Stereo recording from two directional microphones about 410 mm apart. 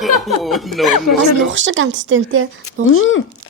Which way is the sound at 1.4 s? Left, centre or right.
Right.